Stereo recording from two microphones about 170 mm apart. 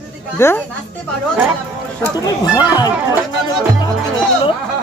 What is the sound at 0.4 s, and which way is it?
Speech, 15° left (ahead or behind).